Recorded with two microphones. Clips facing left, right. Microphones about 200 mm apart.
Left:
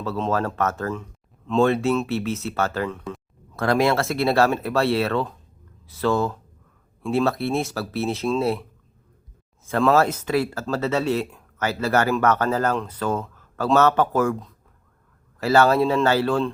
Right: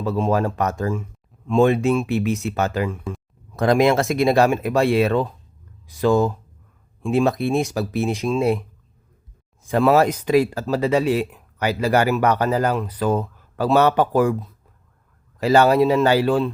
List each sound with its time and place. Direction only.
0.0 s speech: 15° right (ahead or behind)
9.6 s speech: 15° right (ahead or behind)